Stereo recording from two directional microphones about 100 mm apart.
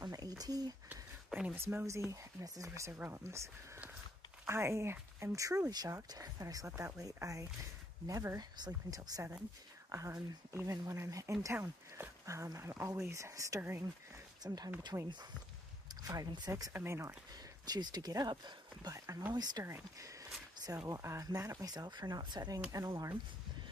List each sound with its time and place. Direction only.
0.0 s a sound: 40° right (ahead or behind)
1.3 s speech: 15° right (ahead or behind); by 2.9 s 30° right (ahead or behind)
2.9 s speech: 20° right (ahead or behind)
14.4 s speech: 40° right (ahead or behind)
17.6 s speech: 45° right (ahead or behind)
18.9 s speech: 35° right (ahead or behind)
19.3 s speech: 45° right (ahead or behind)
19.6 s speech: 30° right (ahead or behind); by 22.6 s 45° right (ahead or behind)
22.7 s speech: 35° right (ahead or behind)